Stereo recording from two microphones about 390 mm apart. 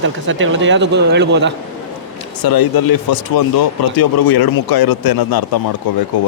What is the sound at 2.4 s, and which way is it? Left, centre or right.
Speech, left.